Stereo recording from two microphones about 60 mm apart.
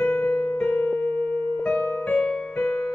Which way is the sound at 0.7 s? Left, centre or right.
Left.